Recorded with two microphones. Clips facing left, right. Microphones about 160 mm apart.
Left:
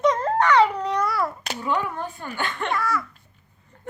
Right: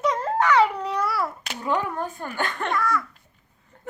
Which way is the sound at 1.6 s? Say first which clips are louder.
Right 1 dB; 40° right (ahead or behind).